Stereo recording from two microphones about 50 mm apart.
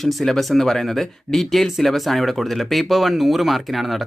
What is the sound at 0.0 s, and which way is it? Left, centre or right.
Speech, centre.